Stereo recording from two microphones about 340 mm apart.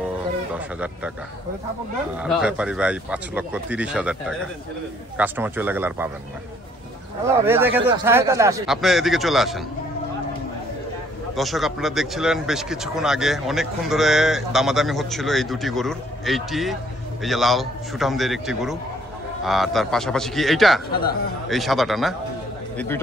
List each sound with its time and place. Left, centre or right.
2.1 s a man's voice: centre
7.4 s a man's voice: centre
11.3 s a man's voice: centre
20.9 s speech: left
21.5 s a man's voice: centre